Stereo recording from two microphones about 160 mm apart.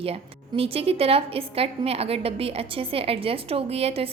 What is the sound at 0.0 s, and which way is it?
A woman's voice, 35° right (ahead or behind).